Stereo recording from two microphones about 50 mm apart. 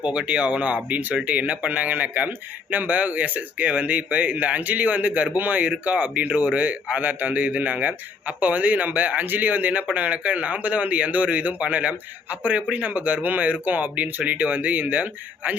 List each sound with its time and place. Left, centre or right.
0.0 s speech: right